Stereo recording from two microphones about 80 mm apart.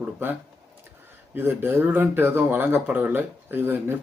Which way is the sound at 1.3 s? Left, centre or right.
Right.